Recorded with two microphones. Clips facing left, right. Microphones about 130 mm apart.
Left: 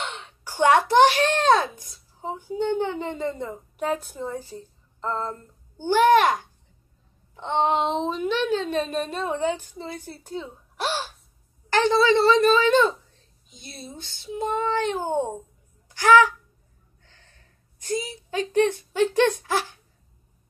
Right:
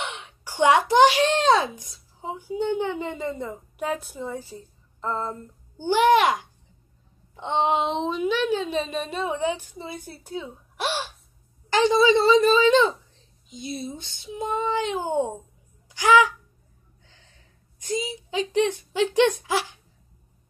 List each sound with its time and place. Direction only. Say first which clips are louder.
0.0 s a sound: even; 15° right (ahead or behind)
2.4 s a woman's voice: even; 10° right (ahead or behind)
7.3 s a woman's voice: even; 15° right (ahead or behind)
7.8 s a woman's voice: even; centre (ahead or behind)
8.7 s a woman's voice: left 1 dB; centre (ahead or behind)
17.9 s a woman's voice: even; 15° right (ahead or behind)